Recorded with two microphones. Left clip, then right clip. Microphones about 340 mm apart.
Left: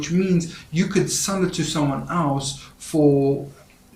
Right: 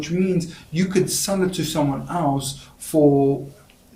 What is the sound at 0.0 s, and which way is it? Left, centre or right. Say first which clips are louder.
Speech: even; right.